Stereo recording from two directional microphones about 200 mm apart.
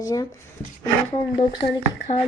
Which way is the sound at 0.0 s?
15° left (ahead or behind).